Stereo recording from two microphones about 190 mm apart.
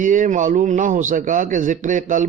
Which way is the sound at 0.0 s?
45° right (ahead or behind).